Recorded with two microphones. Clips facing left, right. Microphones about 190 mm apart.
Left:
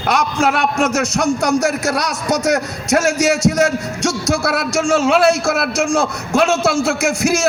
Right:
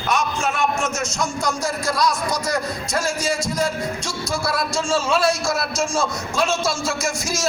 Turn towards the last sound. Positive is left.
turn(degrees=65)  # may be behind; listen again after turning